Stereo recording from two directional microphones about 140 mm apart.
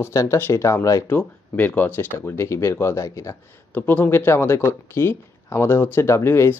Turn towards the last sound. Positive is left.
turn(degrees=20)  # may be behind; listen again after turning